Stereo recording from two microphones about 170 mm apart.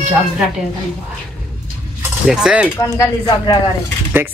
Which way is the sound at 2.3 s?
5° right (ahead or behind).